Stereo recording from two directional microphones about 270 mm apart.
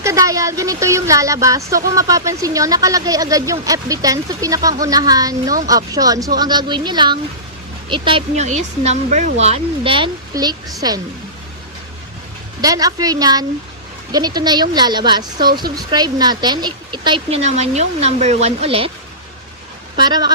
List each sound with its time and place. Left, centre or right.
0.0 s speech: centre
12.6 s speech: centre
20.0 s speech: centre